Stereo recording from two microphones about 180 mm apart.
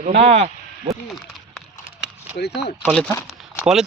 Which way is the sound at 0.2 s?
35° right (ahead or behind).